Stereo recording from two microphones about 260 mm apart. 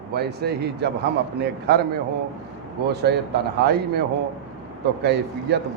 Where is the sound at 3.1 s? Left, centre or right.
Right.